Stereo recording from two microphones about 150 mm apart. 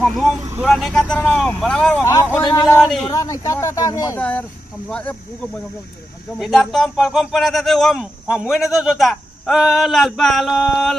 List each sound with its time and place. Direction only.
0.0 s speech: centre (ahead or behind)
2.4 s speech: 30° left (ahead or behind)
2.8 s speech: centre (ahead or behind)
3.1 s speech: 20° left (ahead or behind)
4.2 s speech: 10° left (ahead or behind)